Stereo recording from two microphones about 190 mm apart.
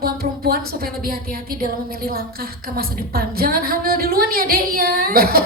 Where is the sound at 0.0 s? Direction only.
50° right (ahead or behind).